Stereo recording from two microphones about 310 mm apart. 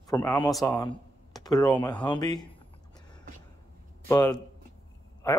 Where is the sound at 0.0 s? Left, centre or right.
Centre.